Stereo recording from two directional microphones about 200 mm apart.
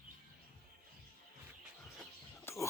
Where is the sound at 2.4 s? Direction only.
15° left (ahead or behind).